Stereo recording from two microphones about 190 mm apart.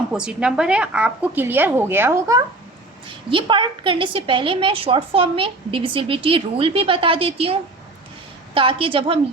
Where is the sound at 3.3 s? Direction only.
25° right (ahead or behind).